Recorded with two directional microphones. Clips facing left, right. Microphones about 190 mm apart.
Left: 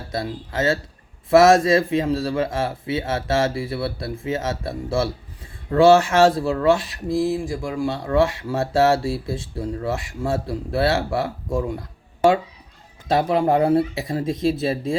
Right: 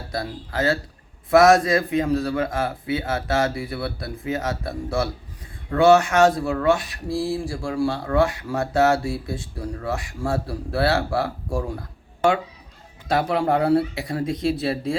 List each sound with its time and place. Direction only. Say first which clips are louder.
0.1 s speech: left 2 dB; 25° left (ahead or behind)
13.1 s speech: left 2 dB; 20° left (ahead or behind)